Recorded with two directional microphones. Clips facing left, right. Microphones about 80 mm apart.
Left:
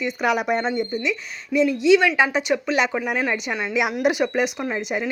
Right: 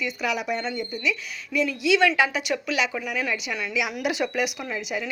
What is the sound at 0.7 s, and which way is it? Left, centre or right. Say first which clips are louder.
Speech: left 4 dB; left.